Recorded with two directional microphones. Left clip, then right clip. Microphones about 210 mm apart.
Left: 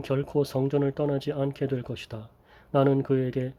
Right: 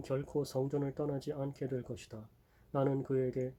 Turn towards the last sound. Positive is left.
turn(degrees=40)  # may be behind; listen again after turning